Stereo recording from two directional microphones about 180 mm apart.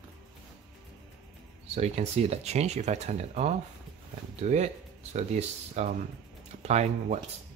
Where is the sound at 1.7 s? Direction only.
35° right (ahead or behind).